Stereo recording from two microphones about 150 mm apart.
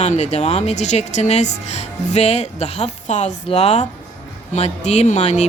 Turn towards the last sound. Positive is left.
turn(degrees=50)  # may be behind; listen again after turning